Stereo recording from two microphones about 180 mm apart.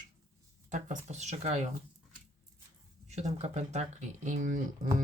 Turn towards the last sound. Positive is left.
turn(degrees=-45)  # may be behind; listen again after turning